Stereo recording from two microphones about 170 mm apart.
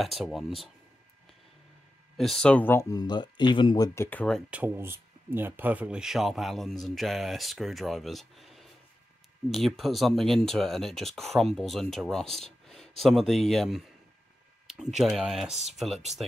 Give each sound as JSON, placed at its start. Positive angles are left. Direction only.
{"t": 0.0, "sound": "speech", "side_deg": 0}
{"t": 2.1, "sound": "speech", "side_deg": 0}
{"t": 4.5, "sound": "speech", "side_deg": -10}
{"t": 15.0, "sound": "speech", "side_deg": 0}